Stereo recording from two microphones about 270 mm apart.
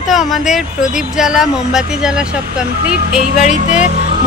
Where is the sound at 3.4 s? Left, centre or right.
Left.